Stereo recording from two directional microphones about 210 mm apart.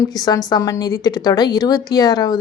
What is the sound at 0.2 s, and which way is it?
Speech, 20° left (ahead or behind).